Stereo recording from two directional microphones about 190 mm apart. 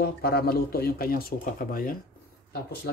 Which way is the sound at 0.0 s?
55° left (ahead or behind).